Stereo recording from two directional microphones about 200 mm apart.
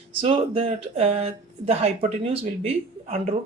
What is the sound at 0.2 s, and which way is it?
Speech, 30° right (ahead or behind).